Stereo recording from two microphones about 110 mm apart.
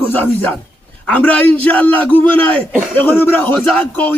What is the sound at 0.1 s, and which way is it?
A man's voice, 15° left (ahead or behind).